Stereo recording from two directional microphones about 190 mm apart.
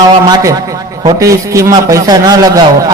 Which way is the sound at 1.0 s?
15° right (ahead or behind).